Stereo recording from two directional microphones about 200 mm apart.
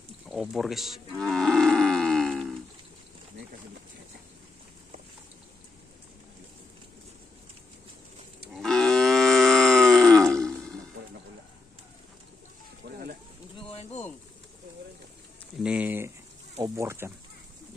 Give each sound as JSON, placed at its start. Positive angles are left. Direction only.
{"t": 0.3, "sound": "livestock", "side_deg": 0}
{"t": 8.5, "sound": "livestock", "side_deg": 5}
{"t": 12.8, "sound": "a sound", "side_deg": -55}
{"t": 13.7, "sound": "pigeon", "side_deg": 30}
{"t": 15.6, "sound": "a sound", "side_deg": -5}
{"t": 16.6, "sound": "chicken", "side_deg": -15}